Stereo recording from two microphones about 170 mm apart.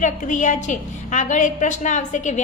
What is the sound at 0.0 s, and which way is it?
A woman's voice, 45° left (ahead or behind).